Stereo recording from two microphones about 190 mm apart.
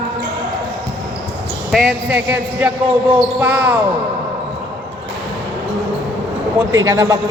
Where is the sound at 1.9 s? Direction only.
5° right (ahead or behind).